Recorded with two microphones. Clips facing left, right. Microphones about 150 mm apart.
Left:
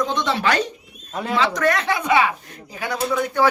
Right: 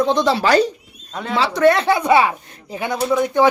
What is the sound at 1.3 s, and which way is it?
Speech, 30° right (ahead or behind).